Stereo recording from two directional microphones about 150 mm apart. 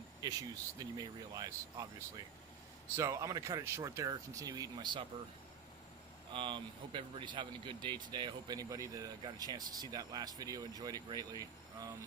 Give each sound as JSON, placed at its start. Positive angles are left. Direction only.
{"t": 0.8, "sound": "speech", "side_deg": -25}
{"t": 6.3, "sound": "speech", "side_deg": -35}